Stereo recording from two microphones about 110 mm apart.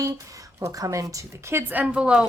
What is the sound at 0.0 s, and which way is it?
Speech, 30° right (ahead or behind).